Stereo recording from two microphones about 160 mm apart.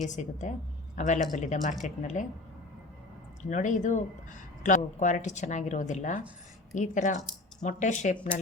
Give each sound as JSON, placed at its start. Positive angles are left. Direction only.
{"t": 0.0, "sound": "speech", "side_deg": 50}
{"t": 3.5, "sound": "speech", "side_deg": 50}